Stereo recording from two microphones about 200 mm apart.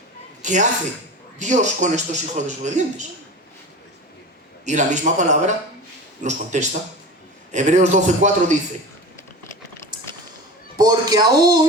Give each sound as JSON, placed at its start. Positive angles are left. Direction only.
{"t": 0.4, "sound": "a man's voice", "side_deg": -40}
{"t": 4.6, "sound": "a man's voice", "side_deg": -35}
{"t": 10.8, "sound": "speech", "side_deg": -20}